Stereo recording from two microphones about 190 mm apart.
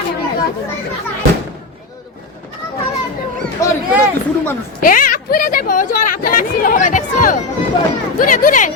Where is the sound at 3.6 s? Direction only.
15° left (ahead or behind).